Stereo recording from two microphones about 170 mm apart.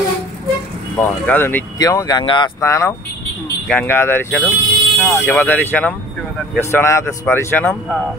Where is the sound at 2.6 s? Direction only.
15° left (ahead or behind).